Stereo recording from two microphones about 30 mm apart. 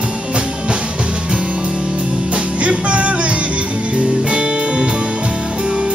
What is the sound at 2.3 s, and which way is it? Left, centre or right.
Music, right.